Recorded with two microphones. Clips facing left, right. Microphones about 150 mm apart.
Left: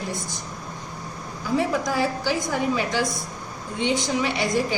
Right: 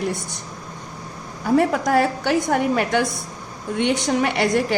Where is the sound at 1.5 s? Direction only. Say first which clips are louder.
Right 5 dB; 60° right (ahead or behind).